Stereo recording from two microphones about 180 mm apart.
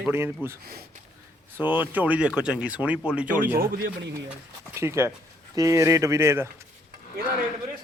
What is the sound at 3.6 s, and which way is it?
Speech, 55° right (ahead or behind).